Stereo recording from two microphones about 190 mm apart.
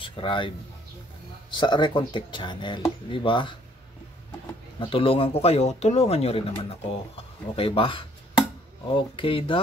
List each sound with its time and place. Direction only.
0.0 s speech: 25° left (ahead or behind)
1.5 s speech: 25° left (ahead or behind)
4.7 s speech: 30° left (ahead or behind)